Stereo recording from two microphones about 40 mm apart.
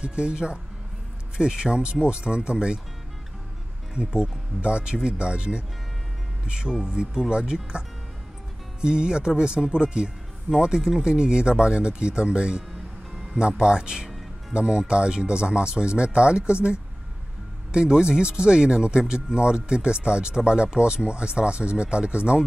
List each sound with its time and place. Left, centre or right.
0.0 s speech: right
3.9 s speech: right
8.8 s speech: right